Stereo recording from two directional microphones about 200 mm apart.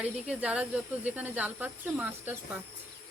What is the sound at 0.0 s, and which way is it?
Speech, 5° right (ahead or behind).